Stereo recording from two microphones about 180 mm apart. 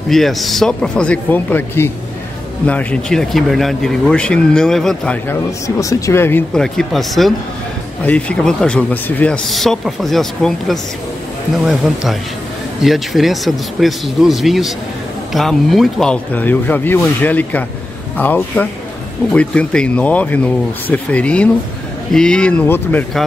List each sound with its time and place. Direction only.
0.1 s speech: centre (ahead or behind)